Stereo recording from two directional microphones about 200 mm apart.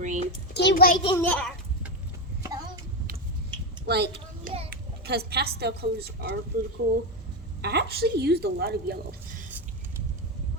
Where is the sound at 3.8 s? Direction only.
55° right (ahead or behind).